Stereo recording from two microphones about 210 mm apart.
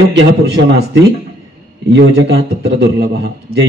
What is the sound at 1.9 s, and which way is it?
Speech, 55° right (ahead or behind).